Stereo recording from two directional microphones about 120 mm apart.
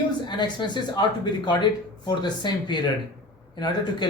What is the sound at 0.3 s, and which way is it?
Speech, 40° left (ahead or behind).